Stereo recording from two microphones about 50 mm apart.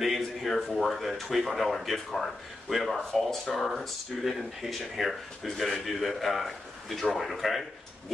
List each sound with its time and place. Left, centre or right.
0.0 s speech: centre